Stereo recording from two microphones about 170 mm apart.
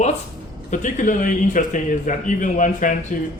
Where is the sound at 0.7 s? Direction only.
50° left (ahead or behind).